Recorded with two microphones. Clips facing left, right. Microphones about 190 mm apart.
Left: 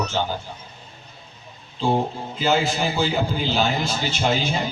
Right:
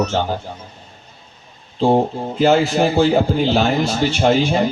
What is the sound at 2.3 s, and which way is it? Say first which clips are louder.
Speech: right 7 dB; 70° right (ahead or behind).